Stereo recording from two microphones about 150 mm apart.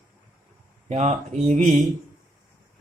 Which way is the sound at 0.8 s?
50° right (ahead or behind).